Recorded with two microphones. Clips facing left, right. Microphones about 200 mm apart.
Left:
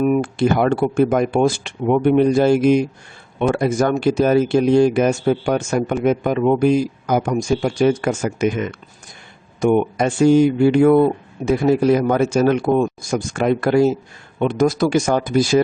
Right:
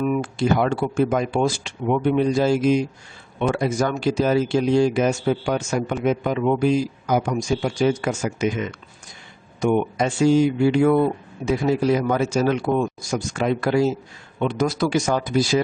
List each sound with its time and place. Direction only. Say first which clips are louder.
0.0 s speech: left 5 dB; 55° left (ahead or behind)